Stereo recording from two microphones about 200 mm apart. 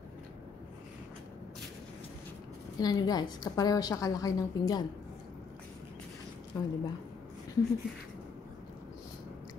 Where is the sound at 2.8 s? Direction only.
20° left (ahead or behind).